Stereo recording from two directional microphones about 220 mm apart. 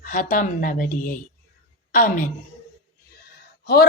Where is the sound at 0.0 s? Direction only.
40° left (ahead or behind).